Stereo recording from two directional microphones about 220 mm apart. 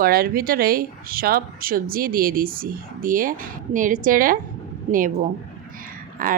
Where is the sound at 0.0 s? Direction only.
40° right (ahead or behind).